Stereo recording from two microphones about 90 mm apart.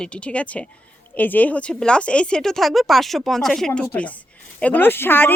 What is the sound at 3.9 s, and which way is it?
A woman's voice, 15° left (ahead or behind).